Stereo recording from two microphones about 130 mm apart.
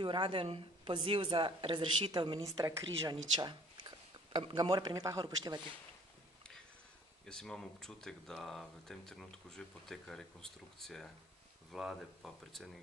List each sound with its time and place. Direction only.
0.0 s speech: 40° right (ahead or behind)
7.2 s speech: 5° left (ahead or behind)